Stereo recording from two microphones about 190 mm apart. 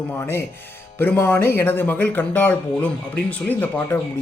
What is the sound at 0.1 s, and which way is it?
Speech, 10° left (ahead or behind).